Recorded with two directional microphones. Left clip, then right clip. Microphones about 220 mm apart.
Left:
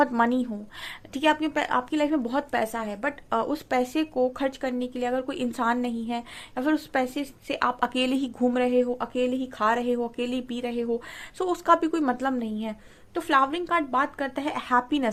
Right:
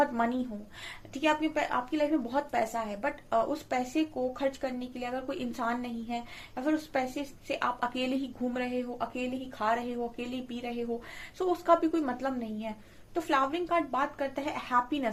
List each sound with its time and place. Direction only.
0.0 s a woman's voice: 50° left (ahead or behind)